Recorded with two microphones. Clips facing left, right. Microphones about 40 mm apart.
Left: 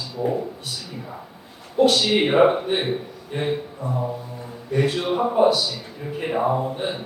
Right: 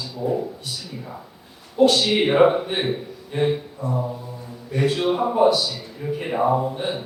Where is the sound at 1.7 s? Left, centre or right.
Centre.